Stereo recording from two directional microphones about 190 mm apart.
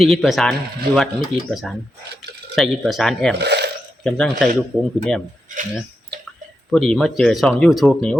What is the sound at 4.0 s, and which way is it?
Speech, 5° left (ahead or behind).